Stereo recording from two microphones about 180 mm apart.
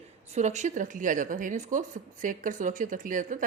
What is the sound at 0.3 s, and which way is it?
A woman's voice, 40° right (ahead or behind).